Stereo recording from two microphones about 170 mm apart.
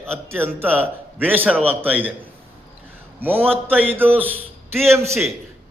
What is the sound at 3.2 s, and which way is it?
A man's voice, 10° right (ahead or behind).